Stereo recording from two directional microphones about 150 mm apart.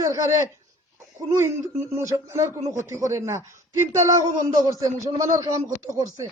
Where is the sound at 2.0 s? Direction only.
20° right (ahead or behind).